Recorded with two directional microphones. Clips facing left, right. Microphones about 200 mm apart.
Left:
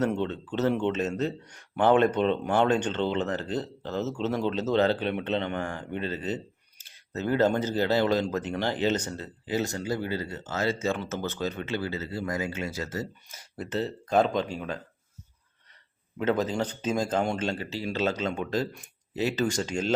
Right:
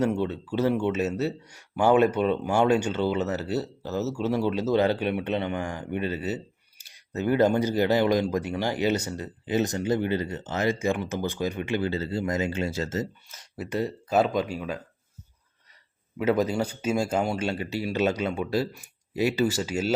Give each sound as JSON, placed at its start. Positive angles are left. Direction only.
{"t": 0.0, "sound": "speech", "side_deg": -10}
{"t": 11.9, "sound": "speech", "side_deg": -30}
{"t": 13.6, "sound": "speech", "side_deg": -10}
{"t": 16.1, "sound": "speech", "side_deg": -10}